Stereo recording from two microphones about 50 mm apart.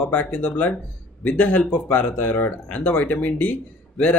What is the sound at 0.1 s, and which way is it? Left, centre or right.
Speech, left.